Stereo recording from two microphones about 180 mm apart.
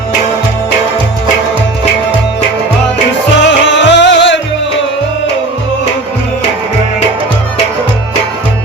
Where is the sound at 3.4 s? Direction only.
85° left.